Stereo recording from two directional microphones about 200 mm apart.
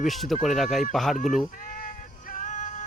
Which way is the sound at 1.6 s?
45° left (ahead or behind).